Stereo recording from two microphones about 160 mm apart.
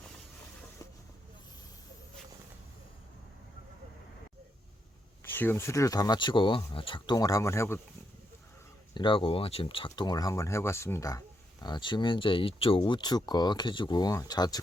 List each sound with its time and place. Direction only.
5.3 s speech: 15° left (ahead or behind)
9.0 s speech: 30° left (ahead or behind)
11.6 s speech: 30° left (ahead or behind)